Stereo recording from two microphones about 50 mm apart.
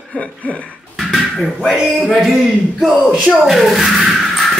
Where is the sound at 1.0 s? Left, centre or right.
Centre.